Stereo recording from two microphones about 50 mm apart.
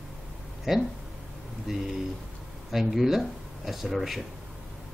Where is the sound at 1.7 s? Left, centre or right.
Centre.